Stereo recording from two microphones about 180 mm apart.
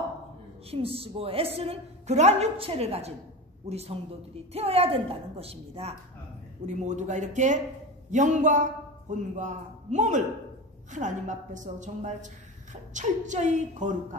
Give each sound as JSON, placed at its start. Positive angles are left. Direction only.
{"t": 0.7, "sound": "a woman's voice", "side_deg": -30}